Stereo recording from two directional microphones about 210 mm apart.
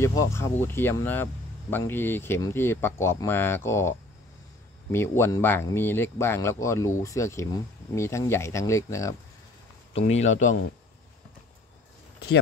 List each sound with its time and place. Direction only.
0.0 s speech: 15° left (ahead or behind)
4.9 s speech: 10° left (ahead or behind)
9.9 s speech: 30° left (ahead or behind)